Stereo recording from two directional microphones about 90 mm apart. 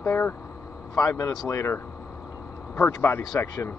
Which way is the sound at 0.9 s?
40° left (ahead or behind).